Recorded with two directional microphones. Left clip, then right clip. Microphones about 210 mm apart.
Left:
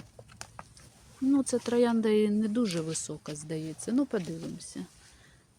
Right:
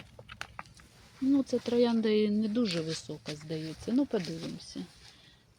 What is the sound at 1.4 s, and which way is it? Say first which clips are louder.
Speech: left 1 dB; 5° left (ahead or behind).